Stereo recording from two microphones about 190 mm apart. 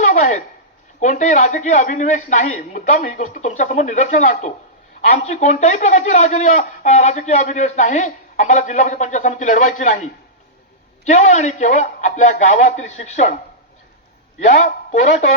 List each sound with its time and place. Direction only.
0.0 s a sound: 40° left (ahead or behind)
0.9 s speech: 40° left (ahead or behind)
14.4 s speech: 40° left (ahead or behind)